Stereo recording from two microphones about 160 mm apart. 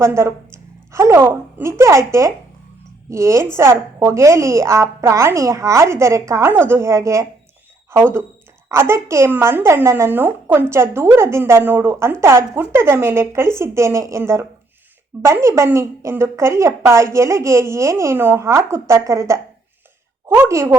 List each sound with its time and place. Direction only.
0.0 s a woman's voice: 15° right (ahead or behind)